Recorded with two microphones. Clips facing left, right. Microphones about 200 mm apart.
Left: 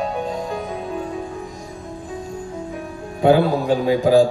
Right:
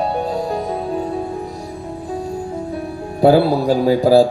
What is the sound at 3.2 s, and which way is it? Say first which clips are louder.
A man's voice: right 3 dB; 35° right (ahead or behind).